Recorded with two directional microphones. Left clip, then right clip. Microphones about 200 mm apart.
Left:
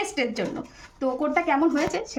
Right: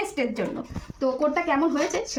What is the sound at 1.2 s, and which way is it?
Speech, 20° left (ahead or behind).